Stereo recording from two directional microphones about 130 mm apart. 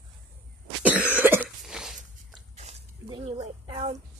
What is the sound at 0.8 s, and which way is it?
Cough, 10° right (ahead or behind).